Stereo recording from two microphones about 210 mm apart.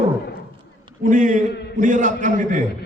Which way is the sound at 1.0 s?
40° right (ahead or behind).